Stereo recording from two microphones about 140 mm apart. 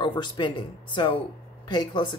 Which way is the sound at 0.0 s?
35° left (ahead or behind).